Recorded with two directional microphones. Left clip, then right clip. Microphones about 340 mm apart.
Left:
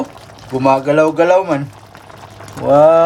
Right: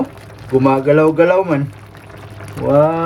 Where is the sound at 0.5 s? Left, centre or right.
Centre.